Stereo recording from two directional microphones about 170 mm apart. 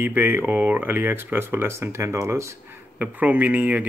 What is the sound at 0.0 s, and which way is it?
Speech, 10° right (ahead or behind).